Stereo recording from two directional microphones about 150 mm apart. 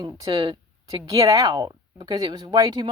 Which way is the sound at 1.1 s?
20° right (ahead or behind).